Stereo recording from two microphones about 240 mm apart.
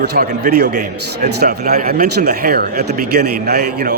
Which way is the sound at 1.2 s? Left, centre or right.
Right.